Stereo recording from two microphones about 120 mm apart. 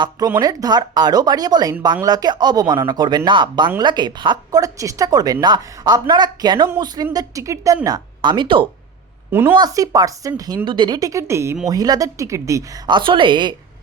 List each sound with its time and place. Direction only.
0.3 s speech: 35° right (ahead or behind)
9.3 s speech: 15° right (ahead or behind)
9.6 s speech: 30° right (ahead or behind)